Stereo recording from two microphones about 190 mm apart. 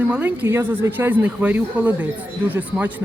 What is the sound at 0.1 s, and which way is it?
A woman's voice, 10° right (ahead or behind).